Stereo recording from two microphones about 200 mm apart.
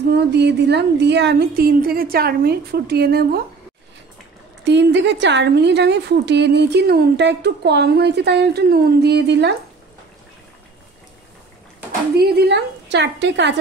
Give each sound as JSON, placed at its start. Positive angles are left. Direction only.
{"t": 0.2, "sound": "a woman's voice", "side_deg": -55}
{"t": 4.6, "sound": "a woman's voice", "side_deg": -60}
{"t": 12.2, "sound": "a woman's voice", "side_deg": -55}